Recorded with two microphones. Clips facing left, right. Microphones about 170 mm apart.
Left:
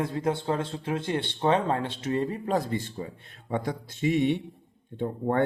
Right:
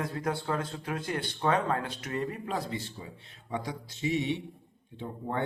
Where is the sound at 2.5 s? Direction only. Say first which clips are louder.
Left 7 dB; 45° left (ahead or behind).